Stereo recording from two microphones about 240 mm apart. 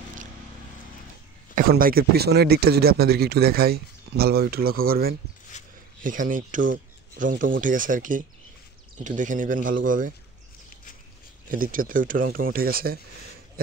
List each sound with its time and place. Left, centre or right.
1.5 s speech: right
6.0 s rub: right
7.6 s speech: right
11.5 s speech: right